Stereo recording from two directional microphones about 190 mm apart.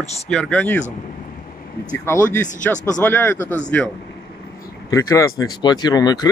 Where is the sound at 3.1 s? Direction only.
10° left (ahead or behind).